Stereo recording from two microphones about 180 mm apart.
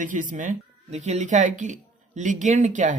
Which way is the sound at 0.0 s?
45° right (ahead or behind).